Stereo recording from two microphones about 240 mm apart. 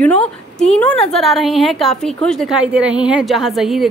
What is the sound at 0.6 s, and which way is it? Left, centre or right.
A woman's voice, centre.